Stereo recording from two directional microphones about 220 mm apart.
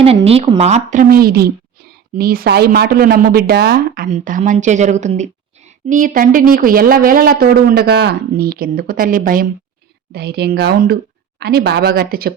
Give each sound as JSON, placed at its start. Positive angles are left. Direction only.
{"t": 0.0, "sound": "a woman's voice", "side_deg": -25}